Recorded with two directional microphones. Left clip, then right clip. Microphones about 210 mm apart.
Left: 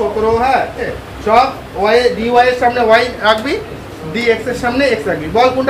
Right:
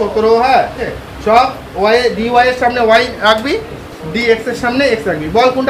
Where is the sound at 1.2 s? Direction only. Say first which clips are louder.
Right 1 dB; 45° right (ahead or behind).